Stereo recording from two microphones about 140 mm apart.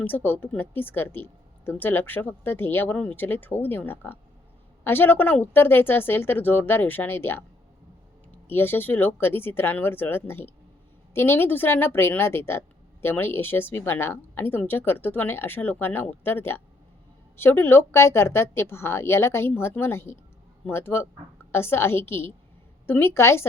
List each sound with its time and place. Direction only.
0.0 s a woman's voice: 15° left (ahead or behind)